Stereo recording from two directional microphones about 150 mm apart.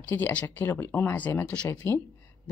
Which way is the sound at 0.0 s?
10° left (ahead or behind).